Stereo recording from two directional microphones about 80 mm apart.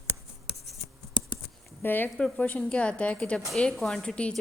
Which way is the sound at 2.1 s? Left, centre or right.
Centre.